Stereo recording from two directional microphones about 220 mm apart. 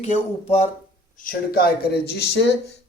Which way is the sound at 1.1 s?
40° left (ahead or behind).